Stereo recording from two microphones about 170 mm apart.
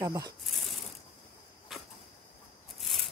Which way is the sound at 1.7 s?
Centre (ahead or behind).